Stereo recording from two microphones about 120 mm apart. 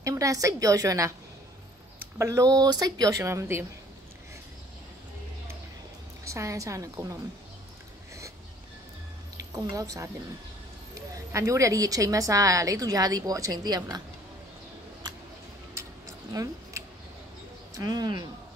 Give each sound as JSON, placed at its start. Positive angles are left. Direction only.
{"t": 0.0, "sound": "a woman's voice", "side_deg": -25}
{"t": 2.1, "sound": "a woman's voice", "side_deg": -25}
{"t": 6.2, "sound": "a woman's voice", "side_deg": -25}
{"t": 9.5, "sound": "a woman's voice", "side_deg": -30}
{"t": 15.7, "sound": "a sound", "side_deg": -25}
{"t": 17.7, "sound": "speech", "side_deg": -35}